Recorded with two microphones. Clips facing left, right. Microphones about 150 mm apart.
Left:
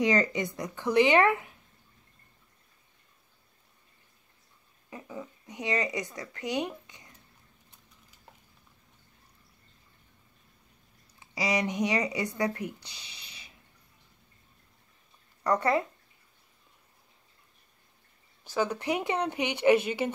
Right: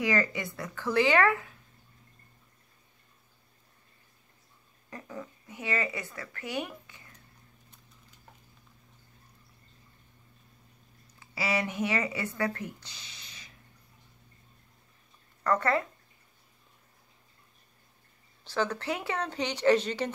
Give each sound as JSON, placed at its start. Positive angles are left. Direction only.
{"t": 0.0, "sound": "speech", "side_deg": 20}
{"t": 4.8, "sound": "speech", "side_deg": 15}
{"t": 11.1, "sound": "speech", "side_deg": 15}
{"t": 15.4, "sound": "speech", "side_deg": 15}
{"t": 18.4, "sound": "speech", "side_deg": 10}